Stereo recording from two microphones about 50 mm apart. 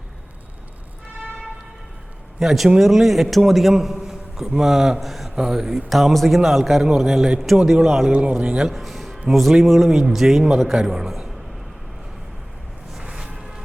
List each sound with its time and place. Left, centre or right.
2.4 s a man's voice: centre
5.3 s a man's voice: centre
8.1 s a man's voice: right
8.7 s music: centre
9.3 s a man's voice: centre
13.0 s music: centre